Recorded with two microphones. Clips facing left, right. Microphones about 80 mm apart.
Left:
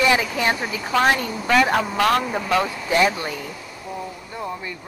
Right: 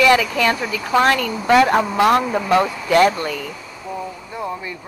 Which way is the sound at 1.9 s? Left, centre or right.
Centre.